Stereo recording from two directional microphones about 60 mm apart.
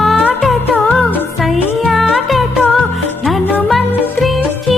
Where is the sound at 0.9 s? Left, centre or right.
Left.